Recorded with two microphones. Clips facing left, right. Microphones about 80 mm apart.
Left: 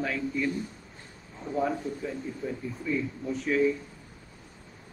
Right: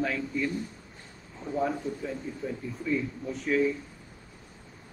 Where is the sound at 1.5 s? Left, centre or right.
Right.